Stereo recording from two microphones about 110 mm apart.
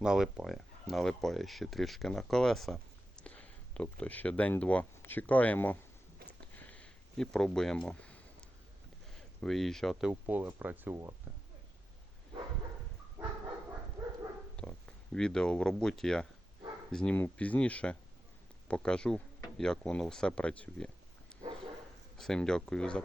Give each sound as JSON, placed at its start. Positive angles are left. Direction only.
{"t": 0.0, "sound": "speech", "side_deg": -5}
{"t": 6.2, "sound": "a sound", "side_deg": 15}
{"t": 9.4, "sound": "speech", "side_deg": 0}
{"t": 10.1, "sound": "speech", "side_deg": -15}
{"t": 14.5, "sound": "speech", "side_deg": 10}
{"t": 22.2, "sound": "speech", "side_deg": 5}